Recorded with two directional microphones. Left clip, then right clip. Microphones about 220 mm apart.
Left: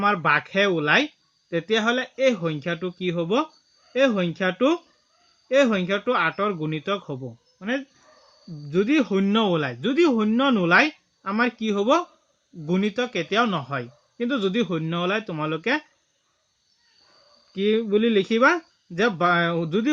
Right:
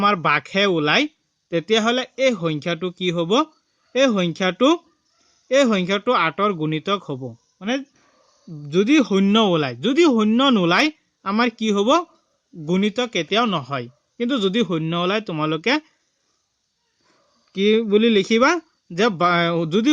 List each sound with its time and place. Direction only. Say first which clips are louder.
0.0 s speech: right 2 dB; 45° right (ahead or behind)
17.5 s speech: right 4 dB; 45° right (ahead or behind)